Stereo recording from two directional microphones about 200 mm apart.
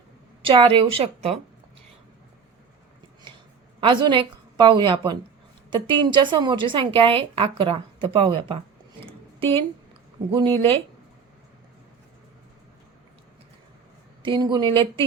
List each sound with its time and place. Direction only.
0.4 s a woman's voice: 25° right (ahead or behind)
3.8 s a woman's voice: 25° right (ahead or behind)
9.0 s a sound: 30° right (ahead or behind)
10.3 s a woman's voice: 25° right (ahead or behind)
14.2 s a woman's voice: 25° right (ahead or behind)